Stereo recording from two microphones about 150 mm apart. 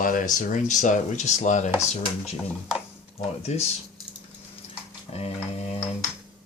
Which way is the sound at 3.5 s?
50° left (ahead or behind).